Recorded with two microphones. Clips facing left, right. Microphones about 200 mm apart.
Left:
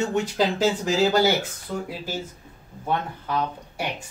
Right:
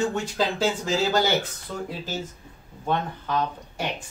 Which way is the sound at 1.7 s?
10° left (ahead or behind).